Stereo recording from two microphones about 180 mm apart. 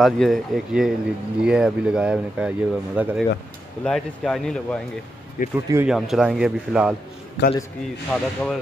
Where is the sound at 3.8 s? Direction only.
5° left (ahead or behind).